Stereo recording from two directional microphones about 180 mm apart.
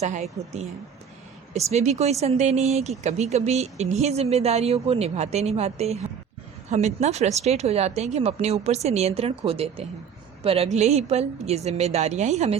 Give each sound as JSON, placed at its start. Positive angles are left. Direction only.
{"t": 0.0, "sound": "speech", "side_deg": -40}